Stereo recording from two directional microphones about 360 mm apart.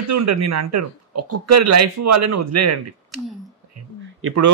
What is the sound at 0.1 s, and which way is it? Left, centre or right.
A man's voice, right.